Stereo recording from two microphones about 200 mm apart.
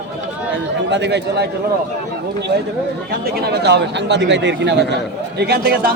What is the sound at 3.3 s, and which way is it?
A man's voice, 55° right (ahead or behind).